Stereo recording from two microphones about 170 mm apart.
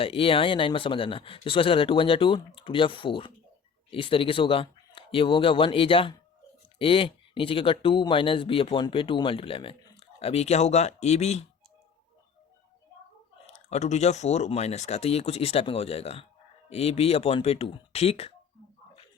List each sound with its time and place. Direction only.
0.0 s speech: 35° left (ahead or behind)
13.5 s speech: 40° left (ahead or behind)